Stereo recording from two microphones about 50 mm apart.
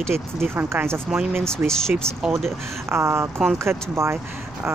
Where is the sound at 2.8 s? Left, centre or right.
Right.